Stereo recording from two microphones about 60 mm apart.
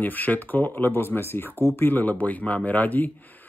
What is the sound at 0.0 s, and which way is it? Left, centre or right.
Speech, left.